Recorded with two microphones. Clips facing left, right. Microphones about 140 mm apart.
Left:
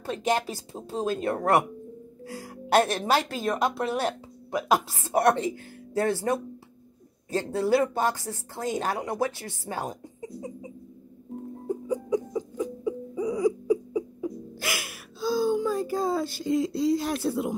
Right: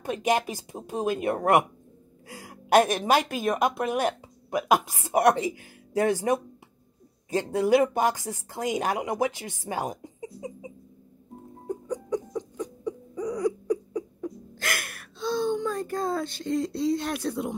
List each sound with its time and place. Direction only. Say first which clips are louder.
0.0 s speech: right 1 dB; 15° right (ahead or behind)
2.2 s music: left 5 dB; 15° right (ahead or behind)
2.7 s speech: right 2 dB; 15° right (ahead or behind)
7.5 s speech: right 2 dB; 15° right (ahead or behind)
11.6 s laughter: left 2 dB; centre (ahead or behind)